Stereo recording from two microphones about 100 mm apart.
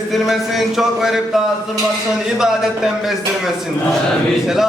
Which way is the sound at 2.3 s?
5° right (ahead or behind).